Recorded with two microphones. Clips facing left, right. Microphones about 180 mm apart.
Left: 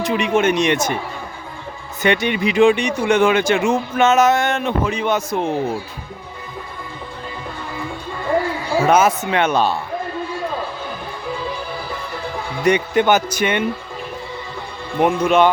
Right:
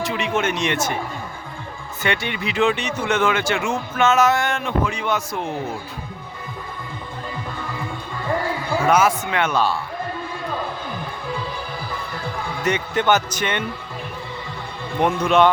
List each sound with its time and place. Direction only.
0.0 s speech: 15° left (ahead or behind)
2.0 s speech: 20° left (ahead or behind)
8.9 s speech: 25° left (ahead or behind)
12.6 s speech: 15° left (ahead or behind)
15.0 s a man's voice: centre (ahead or behind)